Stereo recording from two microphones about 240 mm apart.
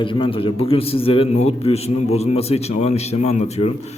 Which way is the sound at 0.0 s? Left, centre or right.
Left.